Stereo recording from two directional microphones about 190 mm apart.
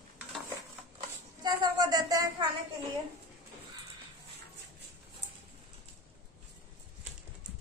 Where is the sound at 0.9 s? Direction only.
20° right (ahead or behind).